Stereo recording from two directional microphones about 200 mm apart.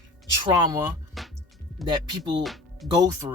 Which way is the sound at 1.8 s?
20° right (ahead or behind).